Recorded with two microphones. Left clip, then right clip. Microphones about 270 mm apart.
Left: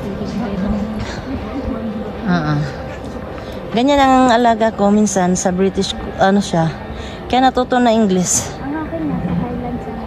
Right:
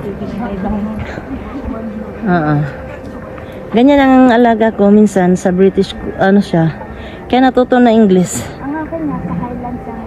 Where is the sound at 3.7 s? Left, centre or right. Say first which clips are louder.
Right 3 dB; centre.